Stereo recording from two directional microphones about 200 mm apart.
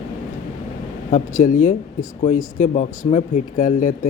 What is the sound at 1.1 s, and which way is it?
Speech, 40° left (ahead or behind).